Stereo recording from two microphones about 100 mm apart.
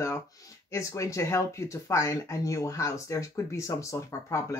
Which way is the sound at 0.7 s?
30° left (ahead or behind).